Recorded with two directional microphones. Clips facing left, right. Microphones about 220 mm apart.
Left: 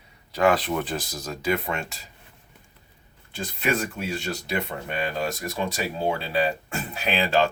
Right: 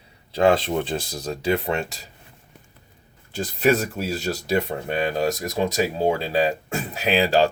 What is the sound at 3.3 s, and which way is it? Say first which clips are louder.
Speech: right 6 dB; 40° right (ahead or behind).